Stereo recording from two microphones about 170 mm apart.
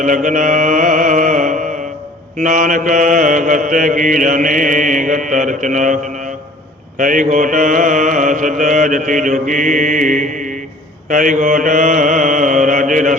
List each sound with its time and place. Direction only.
0.0 s mantra: 50° right (ahead or behind)
7.0 s mantra: 50° right (ahead or behind)